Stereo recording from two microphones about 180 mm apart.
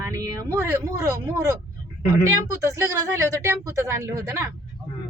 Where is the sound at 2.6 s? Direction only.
15° right (ahead or behind).